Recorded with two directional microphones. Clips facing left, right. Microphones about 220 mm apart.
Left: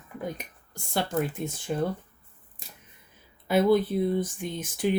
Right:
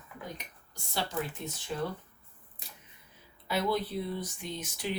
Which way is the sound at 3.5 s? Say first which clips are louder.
Left 9 dB; 50° left (ahead or behind).